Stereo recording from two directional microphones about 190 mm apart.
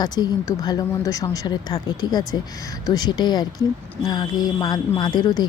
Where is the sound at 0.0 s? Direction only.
20° left (ahead or behind).